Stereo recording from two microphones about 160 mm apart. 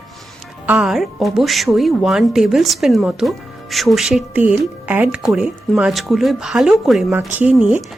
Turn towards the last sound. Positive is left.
turn(degrees=-5)  # may be behind; listen again after turning